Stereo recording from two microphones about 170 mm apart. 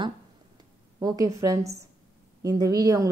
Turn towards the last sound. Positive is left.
turn(degrees=-20)  # may be behind; listen again after turning